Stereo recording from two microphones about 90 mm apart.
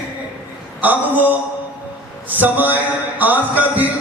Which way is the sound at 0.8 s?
20° right (ahead or behind).